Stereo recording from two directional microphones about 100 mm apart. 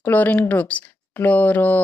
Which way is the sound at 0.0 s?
15° left (ahead or behind).